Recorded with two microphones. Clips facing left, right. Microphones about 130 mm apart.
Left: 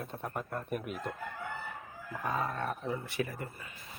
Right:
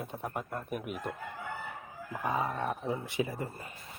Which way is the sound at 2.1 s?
15° right (ahead or behind).